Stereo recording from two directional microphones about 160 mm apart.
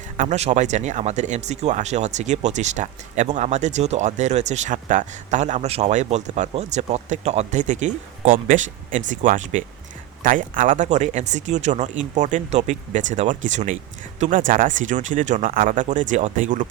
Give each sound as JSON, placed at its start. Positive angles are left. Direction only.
{"t": 0.2, "sound": "speech", "side_deg": -45}